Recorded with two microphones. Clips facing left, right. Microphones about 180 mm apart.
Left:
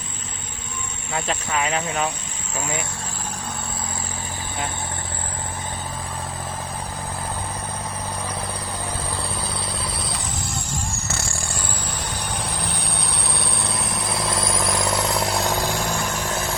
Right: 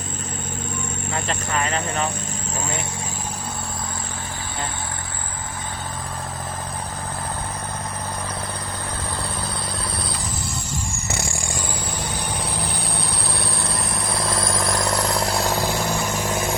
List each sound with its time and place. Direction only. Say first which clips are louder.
1.1 s speech: left 1 dB; 5° left (ahead or behind)
11.1 s a sound: right 2 dB; 15° right (ahead or behind)
12.5 s vehicle: right 1 dB; centre (ahead or behind)